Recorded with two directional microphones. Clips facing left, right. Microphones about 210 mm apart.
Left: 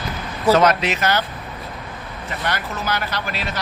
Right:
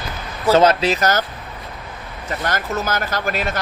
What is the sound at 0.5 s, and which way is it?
Speech, 30° right (ahead or behind).